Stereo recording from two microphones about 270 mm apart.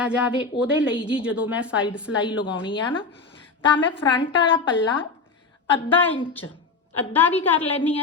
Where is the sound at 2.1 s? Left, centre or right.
Left.